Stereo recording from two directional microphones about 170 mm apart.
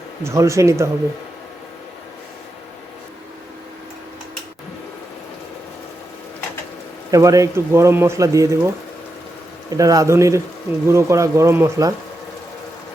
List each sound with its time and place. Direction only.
0.3 s speech: 15° right (ahead or behind)
7.1 s a man's voice: 20° right (ahead or behind)